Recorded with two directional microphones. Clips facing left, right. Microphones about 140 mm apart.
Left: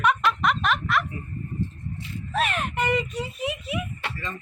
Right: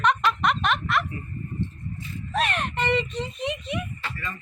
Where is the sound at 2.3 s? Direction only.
Centre (ahead or behind).